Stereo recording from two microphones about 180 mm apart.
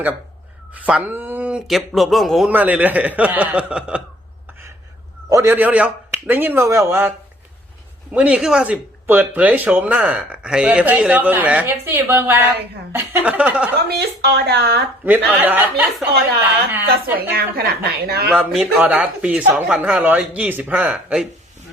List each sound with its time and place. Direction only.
0.7 s speech: 5° right (ahead or behind)
5.3 s speech: 15° right (ahead or behind)
8.1 s speech: 5° right (ahead or behind)
14.2 s a woman's voice: 65° right (ahead or behind)
15.0 s speech: 10° right (ahead or behind)
17.3 s a woman's voice: 60° right (ahead or behind)
18.3 s speech: 5° right (ahead or behind)